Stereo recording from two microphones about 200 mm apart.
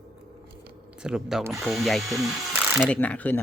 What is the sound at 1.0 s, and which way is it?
Speech, centre (ahead or behind).